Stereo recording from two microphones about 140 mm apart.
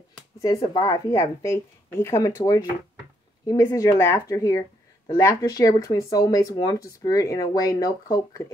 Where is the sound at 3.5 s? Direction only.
25° left (ahead or behind).